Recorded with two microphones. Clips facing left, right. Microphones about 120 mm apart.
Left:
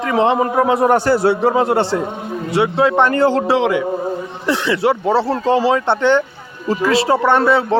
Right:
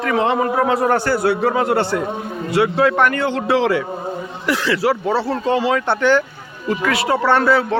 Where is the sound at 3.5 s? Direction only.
20° left (ahead or behind).